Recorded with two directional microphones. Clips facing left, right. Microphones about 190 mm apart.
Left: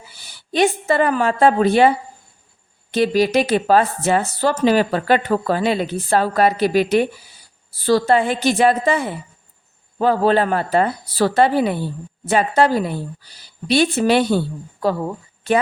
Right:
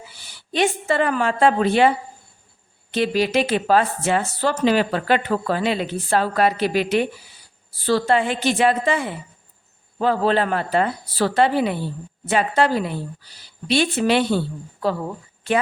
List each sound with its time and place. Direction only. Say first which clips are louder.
0.5 s speech: left 3 dB; 40° left (ahead or behind)
2.9 s a woman's voice: left 3 dB; 40° left (ahead or behind)